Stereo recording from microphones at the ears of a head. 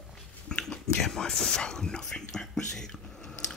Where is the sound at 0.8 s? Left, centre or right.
Left.